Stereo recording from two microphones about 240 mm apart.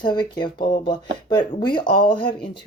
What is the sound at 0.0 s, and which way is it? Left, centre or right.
Speech, centre.